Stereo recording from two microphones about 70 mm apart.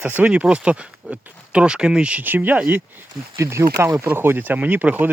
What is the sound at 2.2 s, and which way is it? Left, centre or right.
Speech, right.